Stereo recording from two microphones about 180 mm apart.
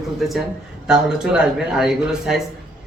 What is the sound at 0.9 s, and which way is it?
Speech, 5° right (ahead or behind).